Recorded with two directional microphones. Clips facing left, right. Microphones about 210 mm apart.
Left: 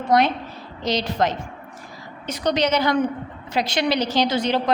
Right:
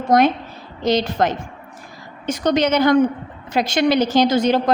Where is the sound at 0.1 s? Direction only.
45° right (ahead or behind).